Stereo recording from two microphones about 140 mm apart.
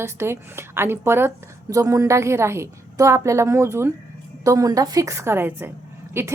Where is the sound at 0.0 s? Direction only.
20° right (ahead or behind).